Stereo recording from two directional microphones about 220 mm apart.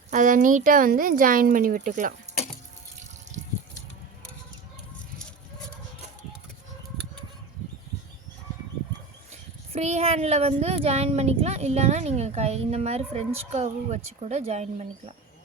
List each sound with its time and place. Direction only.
0.1 s a woman's voice: 35° right (ahead or behind)
9.3 s speech: 30° right (ahead or behind)